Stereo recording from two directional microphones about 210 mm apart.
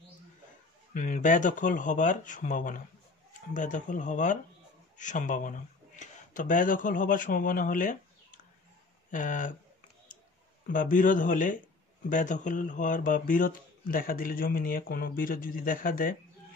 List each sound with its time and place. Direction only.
0.9 s speech: 40° left (ahead or behind)
10.7 s speech: 40° left (ahead or behind)